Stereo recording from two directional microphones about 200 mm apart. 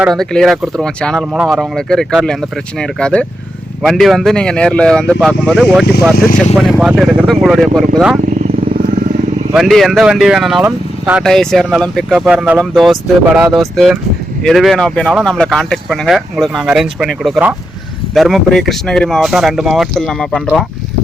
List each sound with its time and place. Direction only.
0.0 s speech: centre (ahead or behind)
6.1 s speech: 45° left (ahead or behind)
6.6 s speech: centre (ahead or behind)
9.6 s speech: centre (ahead or behind)